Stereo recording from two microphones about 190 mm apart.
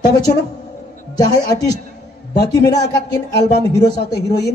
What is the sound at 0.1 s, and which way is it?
A man's voice, 20° left (ahead or behind).